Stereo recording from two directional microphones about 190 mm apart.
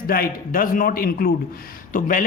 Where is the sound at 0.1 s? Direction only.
50° left (ahead or behind).